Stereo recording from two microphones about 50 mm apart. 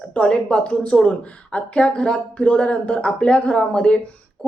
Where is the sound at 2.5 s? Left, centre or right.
Left.